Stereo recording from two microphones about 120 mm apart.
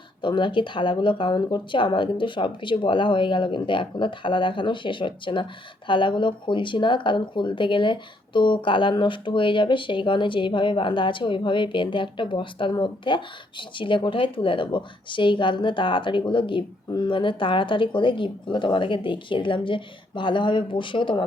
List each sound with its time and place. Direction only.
0.2 s speech: 40° left (ahead or behind)